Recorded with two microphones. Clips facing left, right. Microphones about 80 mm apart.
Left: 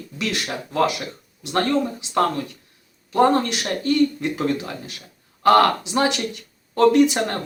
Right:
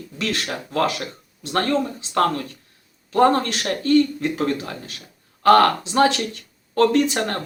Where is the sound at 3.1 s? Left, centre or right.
Centre.